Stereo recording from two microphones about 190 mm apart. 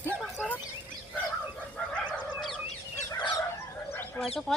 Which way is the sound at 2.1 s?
Centre (ahead or behind).